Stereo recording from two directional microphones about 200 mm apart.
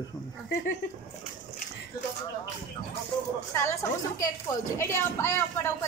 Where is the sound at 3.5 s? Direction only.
15° left (ahead or behind).